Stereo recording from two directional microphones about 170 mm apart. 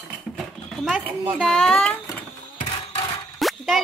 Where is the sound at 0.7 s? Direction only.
Centre (ahead or behind).